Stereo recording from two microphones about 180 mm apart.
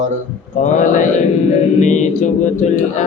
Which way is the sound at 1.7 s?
40° left (ahead or behind).